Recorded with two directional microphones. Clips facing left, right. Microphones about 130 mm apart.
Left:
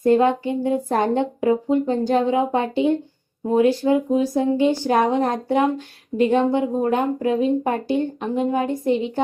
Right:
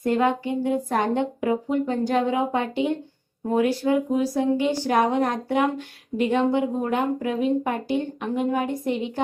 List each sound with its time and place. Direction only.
0.0 s a woman's voice: 30° left (ahead or behind)